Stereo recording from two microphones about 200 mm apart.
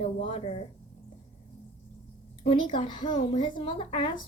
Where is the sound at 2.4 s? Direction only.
25° left (ahead or behind).